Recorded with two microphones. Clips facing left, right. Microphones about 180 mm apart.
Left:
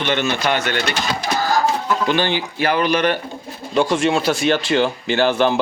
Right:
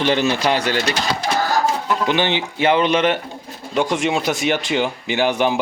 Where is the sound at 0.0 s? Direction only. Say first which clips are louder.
Right 2 dB; 35° right (ahead or behind).